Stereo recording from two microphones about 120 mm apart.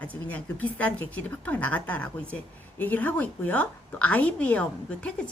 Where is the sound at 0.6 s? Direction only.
10° left (ahead or behind).